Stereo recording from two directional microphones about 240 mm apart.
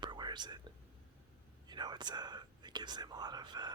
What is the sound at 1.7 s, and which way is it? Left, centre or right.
Speech, centre.